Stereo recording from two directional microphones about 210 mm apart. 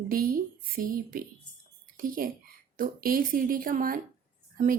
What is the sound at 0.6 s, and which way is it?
Speech, 40° right (ahead or behind).